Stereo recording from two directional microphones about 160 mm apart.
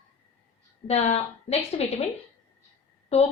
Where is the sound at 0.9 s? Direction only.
40° left (ahead or behind).